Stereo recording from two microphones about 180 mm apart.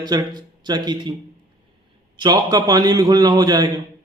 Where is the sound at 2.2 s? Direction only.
20° right (ahead or behind).